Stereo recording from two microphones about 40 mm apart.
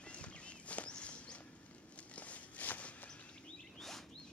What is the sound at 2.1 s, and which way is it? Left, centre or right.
Walk, left.